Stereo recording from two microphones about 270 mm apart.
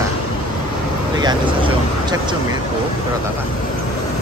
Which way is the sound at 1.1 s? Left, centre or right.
Centre.